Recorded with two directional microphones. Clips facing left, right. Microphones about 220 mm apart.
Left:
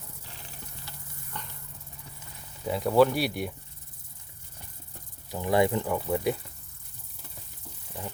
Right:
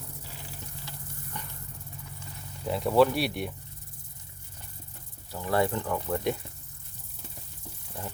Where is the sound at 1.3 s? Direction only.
10° right (ahead or behind).